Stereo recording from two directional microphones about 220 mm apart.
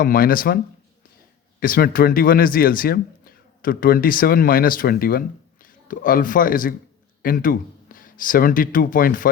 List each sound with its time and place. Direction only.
0.0 s a man's voice: 40° left (ahead or behind)